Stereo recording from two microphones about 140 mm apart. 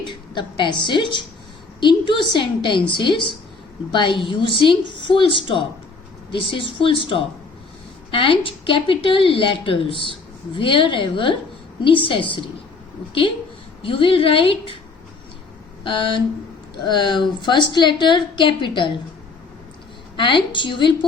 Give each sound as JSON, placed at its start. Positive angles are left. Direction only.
{"t": 0.3, "sound": "a woman's voice", "side_deg": 35}
{"t": 13.8, "sound": "a woman's voice", "side_deg": 40}
{"t": 15.8, "sound": "a woman's voice", "side_deg": 35}
{"t": 20.1, "sound": "a woman's voice", "side_deg": 35}